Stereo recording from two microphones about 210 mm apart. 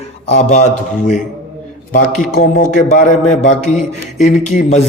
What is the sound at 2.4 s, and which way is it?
A man's voice, 35° left (ahead or behind).